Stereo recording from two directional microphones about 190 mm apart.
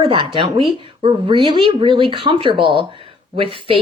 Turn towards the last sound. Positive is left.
turn(degrees=-30)  # may be behind; listen again after turning